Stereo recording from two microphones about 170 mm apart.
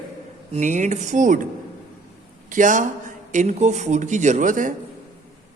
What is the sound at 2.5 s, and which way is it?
Speech, 50° right (ahead or behind).